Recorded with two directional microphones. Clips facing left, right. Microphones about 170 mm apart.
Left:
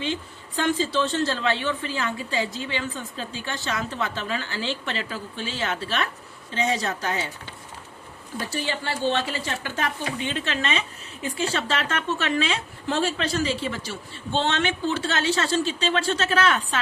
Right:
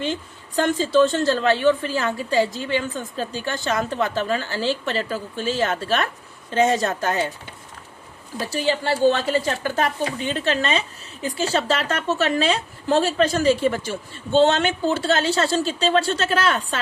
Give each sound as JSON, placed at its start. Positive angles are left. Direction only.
{"t": 0.0, "sound": "a woman's voice", "side_deg": -45}
{"t": 8.4, "sound": "speech", "side_deg": -35}